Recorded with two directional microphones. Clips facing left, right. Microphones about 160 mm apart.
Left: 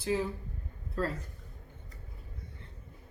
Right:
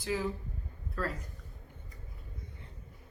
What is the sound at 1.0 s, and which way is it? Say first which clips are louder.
Speech: left 3 dB; 25° left (ahead or behind).